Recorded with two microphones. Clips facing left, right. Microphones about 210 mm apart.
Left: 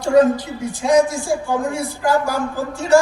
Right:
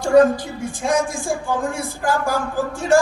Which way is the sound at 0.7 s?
50° right (ahead or behind).